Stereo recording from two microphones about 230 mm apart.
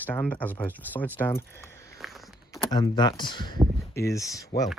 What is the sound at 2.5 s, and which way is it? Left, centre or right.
Speech, centre.